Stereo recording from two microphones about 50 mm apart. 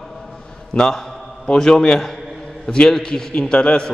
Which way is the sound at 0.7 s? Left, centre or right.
Centre.